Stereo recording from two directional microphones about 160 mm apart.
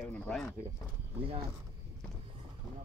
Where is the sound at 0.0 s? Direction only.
5° left (ahead or behind).